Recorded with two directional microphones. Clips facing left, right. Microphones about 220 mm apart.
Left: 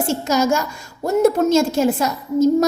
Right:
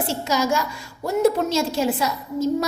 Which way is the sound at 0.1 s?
45° left (ahead or behind).